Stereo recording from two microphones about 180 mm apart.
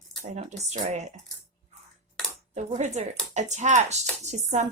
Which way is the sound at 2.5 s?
40° right (ahead or behind).